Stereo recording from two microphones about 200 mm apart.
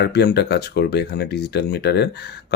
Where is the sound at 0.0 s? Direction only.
55° left (ahead or behind).